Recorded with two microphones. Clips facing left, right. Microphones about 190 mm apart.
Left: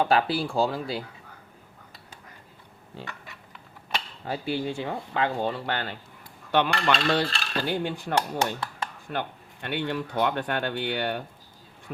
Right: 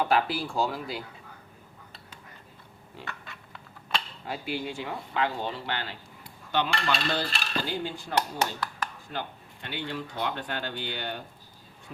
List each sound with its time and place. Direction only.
0.0 s speech: 30° left (ahead or behind)
3.0 s a sound: 20° left (ahead or behind)
4.3 s speech: 30° left (ahead or behind); by 6.0 s 50° left (ahead or behind)
6.5 s cutlery: 60° left (ahead or behind)
7.7 s speech: 60° left (ahead or behind)